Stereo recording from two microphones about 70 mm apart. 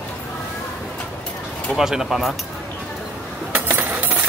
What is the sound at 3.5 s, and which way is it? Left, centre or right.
Coin, right.